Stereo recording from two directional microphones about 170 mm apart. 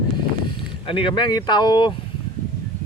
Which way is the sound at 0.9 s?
30° left (ahead or behind).